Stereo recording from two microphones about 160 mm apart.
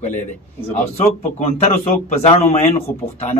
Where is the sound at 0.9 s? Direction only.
40° left (ahead or behind).